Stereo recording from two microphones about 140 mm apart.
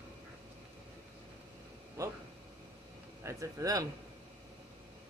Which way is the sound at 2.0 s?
25° right (ahead or behind).